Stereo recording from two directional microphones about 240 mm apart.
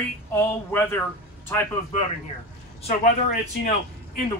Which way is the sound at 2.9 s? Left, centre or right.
Left.